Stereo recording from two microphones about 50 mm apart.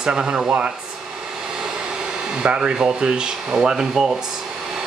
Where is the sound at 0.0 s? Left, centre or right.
Centre.